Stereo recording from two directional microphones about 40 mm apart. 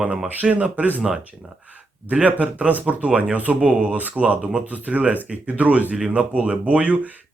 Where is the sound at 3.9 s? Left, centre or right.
Right.